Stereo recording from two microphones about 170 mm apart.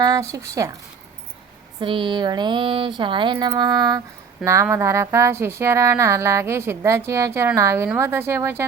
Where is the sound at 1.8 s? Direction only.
30° right (ahead or behind).